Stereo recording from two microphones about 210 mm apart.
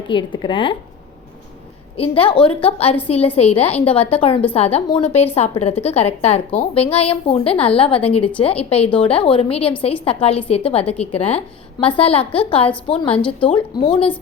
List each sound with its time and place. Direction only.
0.1 s a woman's voice: 20° left (ahead or behind)
2.0 s a woman's voice: 25° left (ahead or behind)